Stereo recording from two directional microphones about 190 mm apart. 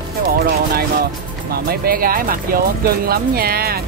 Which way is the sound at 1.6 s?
50° right (ahead or behind).